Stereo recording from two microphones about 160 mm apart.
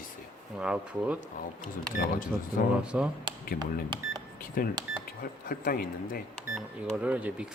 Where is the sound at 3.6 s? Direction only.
25° right (ahead or behind).